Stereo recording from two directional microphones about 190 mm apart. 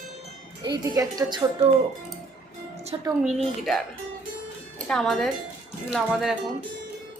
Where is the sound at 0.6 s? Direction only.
20° right (ahead or behind).